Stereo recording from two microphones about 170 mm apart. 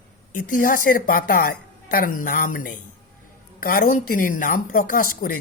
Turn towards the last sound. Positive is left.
turn(degrees=55)  # may be behind; listen again after turning